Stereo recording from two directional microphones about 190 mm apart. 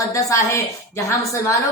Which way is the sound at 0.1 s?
15° left (ahead or behind).